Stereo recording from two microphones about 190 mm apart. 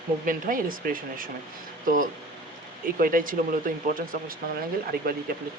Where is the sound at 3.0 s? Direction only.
45° right (ahead or behind).